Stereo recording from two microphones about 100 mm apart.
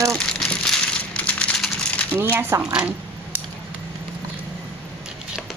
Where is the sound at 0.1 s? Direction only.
5° left (ahead or behind).